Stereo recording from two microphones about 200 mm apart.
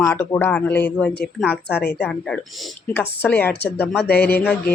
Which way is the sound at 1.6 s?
55° left (ahead or behind).